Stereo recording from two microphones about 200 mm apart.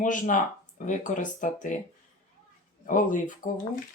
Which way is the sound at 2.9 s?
40° left (ahead or behind).